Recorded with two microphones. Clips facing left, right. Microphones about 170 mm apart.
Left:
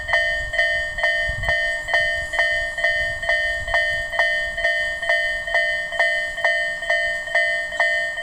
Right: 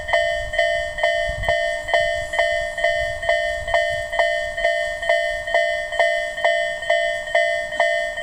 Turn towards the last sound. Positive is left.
turn(degrees=-20)  # may be behind; listen again after turning